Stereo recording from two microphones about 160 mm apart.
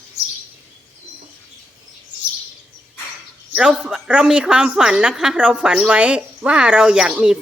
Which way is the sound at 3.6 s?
5° right (ahead or behind).